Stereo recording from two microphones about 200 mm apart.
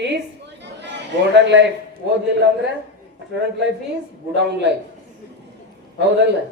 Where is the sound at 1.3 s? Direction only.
60° right (ahead or behind).